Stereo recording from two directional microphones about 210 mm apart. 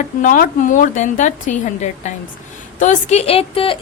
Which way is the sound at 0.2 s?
40° left (ahead or behind).